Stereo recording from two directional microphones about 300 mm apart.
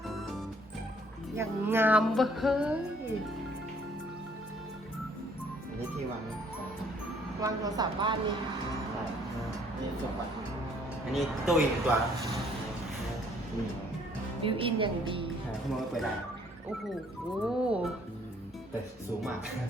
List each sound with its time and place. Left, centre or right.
0.1 s music: centre
7.4 s a woman's voice: centre
11.1 s music: centre
14.4 s a woman's voice: centre
15.8 s music: centre
17.4 s music: centre